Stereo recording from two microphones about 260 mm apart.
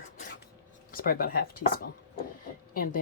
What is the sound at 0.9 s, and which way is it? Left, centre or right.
Speech, left.